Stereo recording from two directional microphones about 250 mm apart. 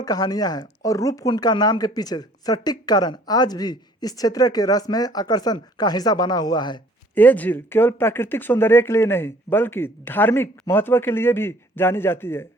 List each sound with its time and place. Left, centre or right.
0.0 s speech: centre
7.2 s speech: centre